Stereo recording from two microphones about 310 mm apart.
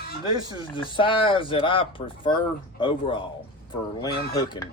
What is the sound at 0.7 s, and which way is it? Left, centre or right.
Speech, centre.